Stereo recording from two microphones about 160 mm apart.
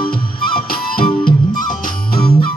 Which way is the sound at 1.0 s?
30° left (ahead or behind).